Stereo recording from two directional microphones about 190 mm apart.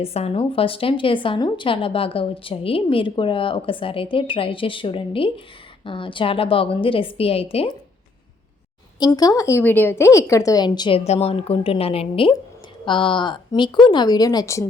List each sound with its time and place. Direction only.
0.0 s a woman's voice: 30° left (ahead or behind)
9.0 s a woman's voice: 20° left (ahead or behind)